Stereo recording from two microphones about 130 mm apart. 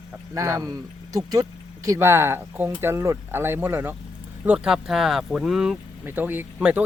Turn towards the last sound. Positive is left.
turn(degrees=-10)  # may be behind; listen again after turning